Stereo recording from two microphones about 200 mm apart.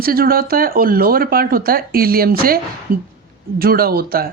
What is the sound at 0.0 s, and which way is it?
Speech, 50° right (ahead or behind).